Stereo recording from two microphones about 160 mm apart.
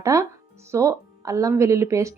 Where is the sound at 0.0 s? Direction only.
20° right (ahead or behind).